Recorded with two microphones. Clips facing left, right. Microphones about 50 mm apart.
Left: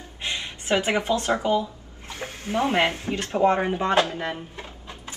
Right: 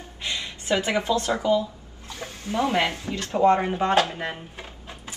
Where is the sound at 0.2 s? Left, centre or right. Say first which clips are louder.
Left 1 dB; left.